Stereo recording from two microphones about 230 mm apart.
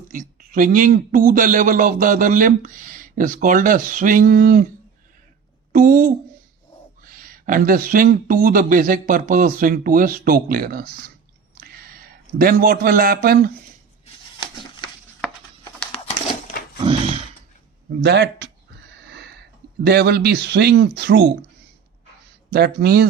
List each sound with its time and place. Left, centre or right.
0.1 s a man's voice: right
5.7 s a man's voice: right
15.9 s a sound: left
18.0 s speech: right
19.8 s speech: right
22.4 s speech: right